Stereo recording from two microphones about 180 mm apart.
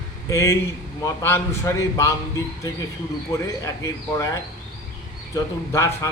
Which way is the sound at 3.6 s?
15° left (ahead or behind).